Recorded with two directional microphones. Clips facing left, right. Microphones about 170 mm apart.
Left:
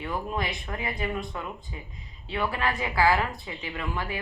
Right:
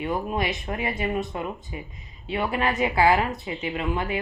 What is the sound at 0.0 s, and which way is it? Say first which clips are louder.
Speech: right 4 dB; 20° right (ahead or behind).